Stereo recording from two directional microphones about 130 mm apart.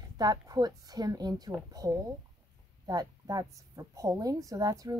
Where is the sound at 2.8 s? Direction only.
30° right (ahead or behind).